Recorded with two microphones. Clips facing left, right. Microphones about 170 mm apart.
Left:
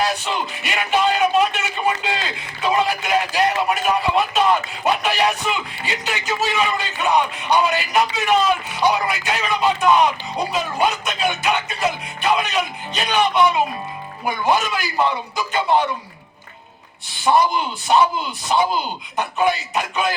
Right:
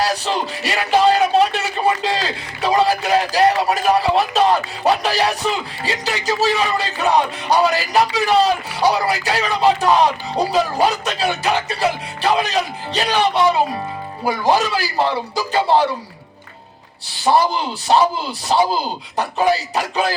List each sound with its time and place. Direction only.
0.0 s speech: 35° right (ahead or behind)
17.2 s speech: 35° right (ahead or behind)